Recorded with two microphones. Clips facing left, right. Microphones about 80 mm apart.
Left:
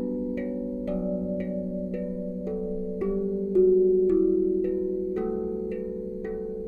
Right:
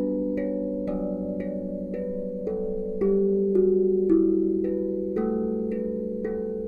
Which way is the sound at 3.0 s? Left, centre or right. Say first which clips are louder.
Right 7 dB; centre.